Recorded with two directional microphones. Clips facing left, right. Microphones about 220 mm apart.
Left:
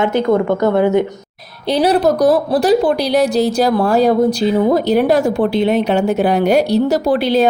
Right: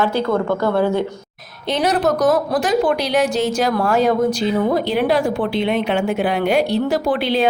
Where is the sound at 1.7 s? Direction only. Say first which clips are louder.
Left 5 dB; 35° left (ahead or behind).